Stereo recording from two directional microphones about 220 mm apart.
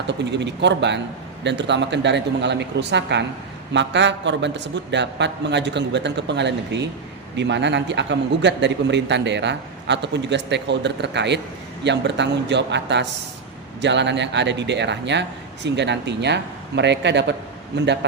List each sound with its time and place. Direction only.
0.1 s a man's voice: 50° right (ahead or behind)